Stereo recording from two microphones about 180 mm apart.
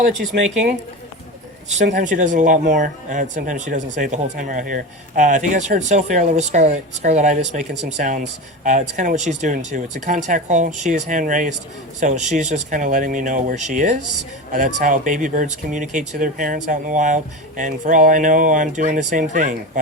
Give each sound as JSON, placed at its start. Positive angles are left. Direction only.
{"t": 0.3, "sound": "speech", "side_deg": -55}
{"t": 1.8, "sound": "speech", "side_deg": -45}